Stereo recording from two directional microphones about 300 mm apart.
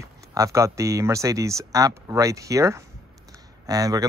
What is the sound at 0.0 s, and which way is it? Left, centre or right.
Speech, centre.